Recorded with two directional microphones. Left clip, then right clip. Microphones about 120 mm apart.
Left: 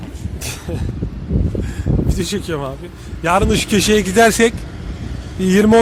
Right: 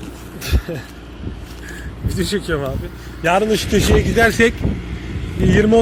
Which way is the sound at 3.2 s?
70° left (ahead or behind).